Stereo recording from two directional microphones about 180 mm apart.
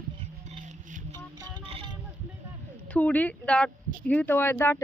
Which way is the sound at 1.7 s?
30° right (ahead or behind).